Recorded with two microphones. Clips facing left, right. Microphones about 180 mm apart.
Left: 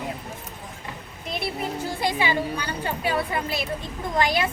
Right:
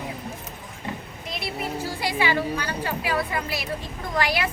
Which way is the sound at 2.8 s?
25° left (ahead or behind).